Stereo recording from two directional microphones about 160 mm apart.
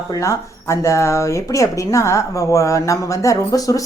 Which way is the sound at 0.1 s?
20° left (ahead or behind).